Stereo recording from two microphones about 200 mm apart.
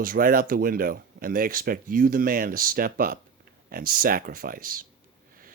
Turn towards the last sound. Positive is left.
turn(degrees=-45)  # may be behind; listen again after turning